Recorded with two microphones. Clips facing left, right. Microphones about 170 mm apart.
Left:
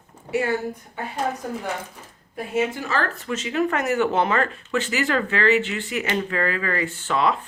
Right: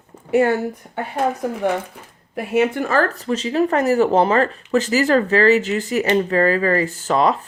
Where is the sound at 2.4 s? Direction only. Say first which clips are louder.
Right 6 dB; 65° right (ahead or behind).